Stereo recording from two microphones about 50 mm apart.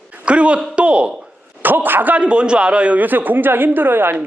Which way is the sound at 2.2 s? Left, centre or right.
Right.